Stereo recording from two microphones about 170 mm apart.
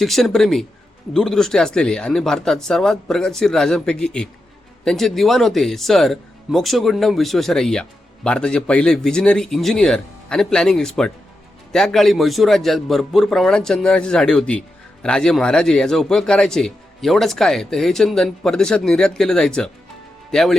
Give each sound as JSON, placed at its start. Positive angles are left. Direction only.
{"t": 0.0, "sound": "speech", "side_deg": 0}